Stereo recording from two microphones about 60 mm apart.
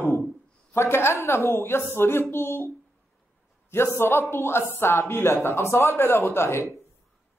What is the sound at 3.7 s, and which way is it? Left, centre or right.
A man's voice, left.